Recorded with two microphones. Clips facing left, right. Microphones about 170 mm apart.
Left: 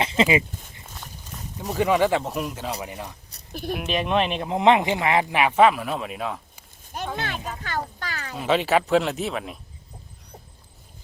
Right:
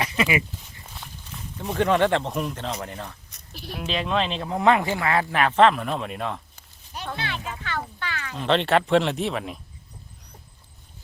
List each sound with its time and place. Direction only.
0.0 s speech: 25° left (ahead or behind)
1.7 s speech: 5° left (ahead or behind)
7.2 s a child's voice: 45° left (ahead or behind)
8.4 s speech: 5° left (ahead or behind)